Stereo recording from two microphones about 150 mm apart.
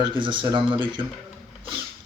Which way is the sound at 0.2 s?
35° right (ahead or behind).